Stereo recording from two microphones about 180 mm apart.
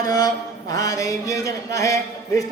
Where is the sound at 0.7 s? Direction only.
20° left (ahead or behind).